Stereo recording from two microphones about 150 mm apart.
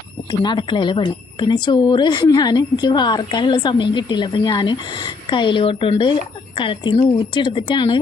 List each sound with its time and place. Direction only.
0.3 s a woman's voice: 30° left (ahead or behind)